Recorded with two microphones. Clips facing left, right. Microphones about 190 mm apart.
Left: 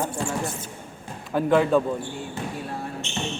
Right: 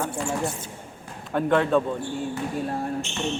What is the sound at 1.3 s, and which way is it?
Speech, 5° left (ahead or behind).